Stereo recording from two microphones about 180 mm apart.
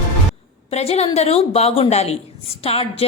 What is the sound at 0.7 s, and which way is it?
A woman's voice, 35° left (ahead or behind).